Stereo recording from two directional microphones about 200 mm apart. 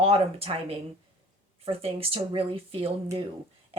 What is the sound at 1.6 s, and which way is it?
A woman's voice, 30° right (ahead or behind).